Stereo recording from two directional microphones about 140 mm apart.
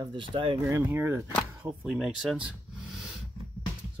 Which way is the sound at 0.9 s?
20° right (ahead or behind).